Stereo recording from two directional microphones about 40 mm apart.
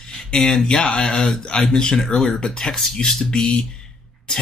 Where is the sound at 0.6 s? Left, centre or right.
Left.